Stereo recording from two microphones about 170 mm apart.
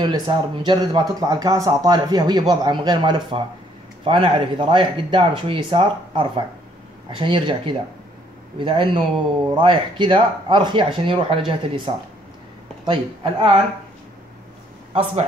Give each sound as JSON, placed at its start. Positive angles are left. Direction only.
{"t": 0.0, "sound": "speech", "side_deg": -25}